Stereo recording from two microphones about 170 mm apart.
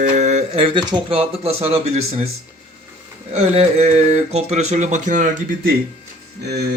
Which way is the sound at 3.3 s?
40° right (ahead or behind).